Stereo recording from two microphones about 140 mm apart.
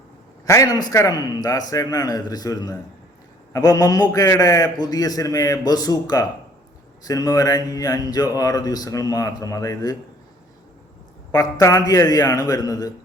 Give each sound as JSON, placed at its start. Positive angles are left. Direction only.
{"t": 0.4, "sound": "speech", "side_deg": 20}
{"t": 11.3, "sound": "speech", "side_deg": 25}